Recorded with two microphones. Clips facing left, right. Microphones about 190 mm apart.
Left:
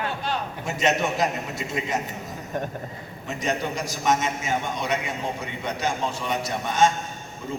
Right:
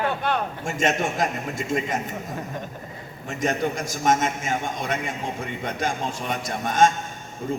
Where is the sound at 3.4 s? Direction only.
50° right (ahead or behind).